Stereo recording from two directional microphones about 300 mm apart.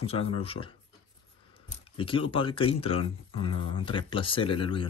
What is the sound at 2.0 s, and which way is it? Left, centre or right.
Speech, centre.